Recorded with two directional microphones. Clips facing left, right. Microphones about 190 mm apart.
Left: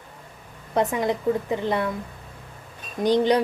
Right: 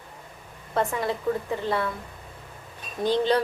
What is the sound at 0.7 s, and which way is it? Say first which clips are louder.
A woman's voice: left 3 dB; 15° left (ahead or behind).